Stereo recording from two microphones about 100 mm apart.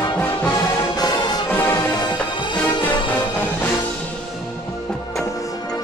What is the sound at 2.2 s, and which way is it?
Music, 55° left (ahead or behind).